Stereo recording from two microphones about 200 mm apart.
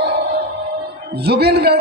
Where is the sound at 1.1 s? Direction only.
55° right (ahead or behind).